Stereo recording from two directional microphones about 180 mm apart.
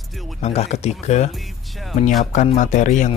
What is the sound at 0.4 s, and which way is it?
Speech, 35° left (ahead or behind).